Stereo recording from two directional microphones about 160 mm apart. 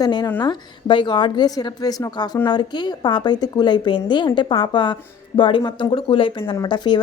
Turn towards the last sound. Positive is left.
turn(degrees=30)  # may be behind; listen again after turning